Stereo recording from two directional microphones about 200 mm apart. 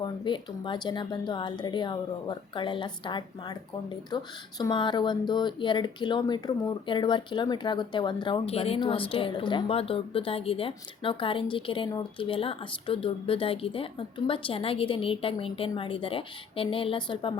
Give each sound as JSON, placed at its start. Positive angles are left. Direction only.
{"t": 0.0, "sound": "speech", "side_deg": 25}